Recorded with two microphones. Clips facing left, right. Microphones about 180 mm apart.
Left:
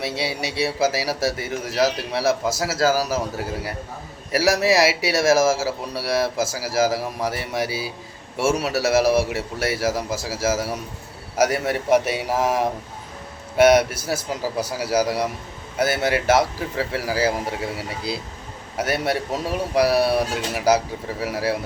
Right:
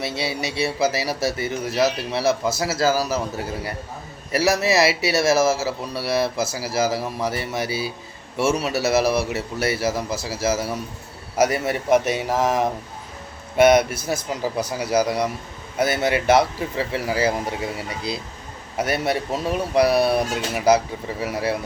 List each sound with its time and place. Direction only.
0.0 s a man's voice: 10° left (ahead or behind)
2.6 s a man's voice: 80° left
2.8 s a man's voice: 10° left (ahead or behind)